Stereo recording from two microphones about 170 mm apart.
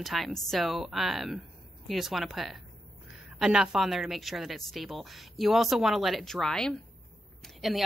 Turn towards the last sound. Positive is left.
turn(degrees=0)  # may be behind; listen again after turning